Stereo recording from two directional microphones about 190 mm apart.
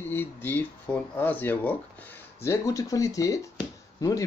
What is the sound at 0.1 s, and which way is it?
Speech, 10° left (ahead or behind).